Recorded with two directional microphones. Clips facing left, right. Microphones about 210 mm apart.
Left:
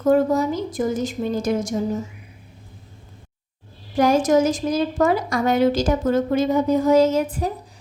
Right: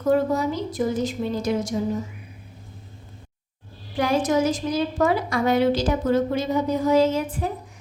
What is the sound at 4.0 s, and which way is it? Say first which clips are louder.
A woman's voice: left 4 dB; 45° left (ahead or behind).